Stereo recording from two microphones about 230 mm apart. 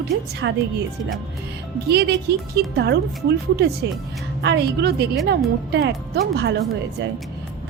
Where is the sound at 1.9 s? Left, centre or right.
Right.